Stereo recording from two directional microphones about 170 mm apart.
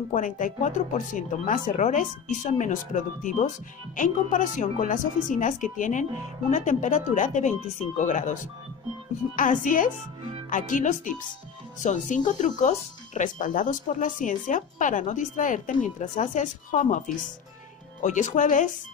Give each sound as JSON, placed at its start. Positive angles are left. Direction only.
{"t": 0.1, "sound": "speech", "side_deg": 50}
{"t": 18.0, "sound": "speech", "side_deg": 45}